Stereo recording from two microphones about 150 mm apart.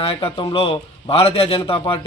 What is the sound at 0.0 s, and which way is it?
A man's voice, 40° left (ahead or behind).